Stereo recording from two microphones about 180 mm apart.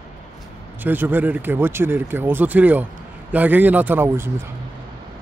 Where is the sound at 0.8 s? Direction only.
10° right (ahead or behind).